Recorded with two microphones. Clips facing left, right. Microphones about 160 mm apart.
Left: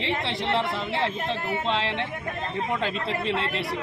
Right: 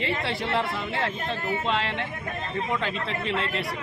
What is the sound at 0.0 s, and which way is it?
Speech, 25° left (ahead or behind).